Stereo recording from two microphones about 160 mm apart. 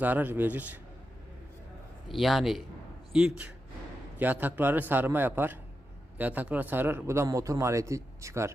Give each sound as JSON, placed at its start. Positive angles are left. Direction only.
{"t": 0.0, "sound": "speech", "side_deg": -10}
{"t": 2.0, "sound": "a man's voice", "side_deg": 0}